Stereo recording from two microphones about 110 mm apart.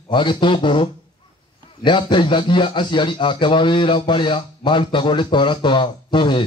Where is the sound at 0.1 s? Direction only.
45° left (ahead or behind).